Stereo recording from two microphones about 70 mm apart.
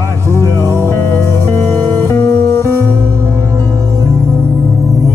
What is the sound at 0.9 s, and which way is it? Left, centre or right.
Music, left.